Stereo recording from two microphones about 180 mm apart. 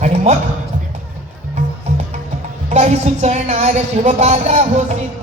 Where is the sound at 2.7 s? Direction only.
40° right (ahead or behind).